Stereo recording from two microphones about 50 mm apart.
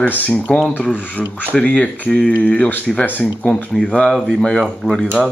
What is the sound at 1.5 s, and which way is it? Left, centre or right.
Speech, left.